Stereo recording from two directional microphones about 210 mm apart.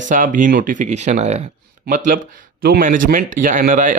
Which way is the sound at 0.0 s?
40° right (ahead or behind).